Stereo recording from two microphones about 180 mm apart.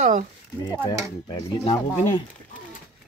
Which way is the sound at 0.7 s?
20° left (ahead or behind).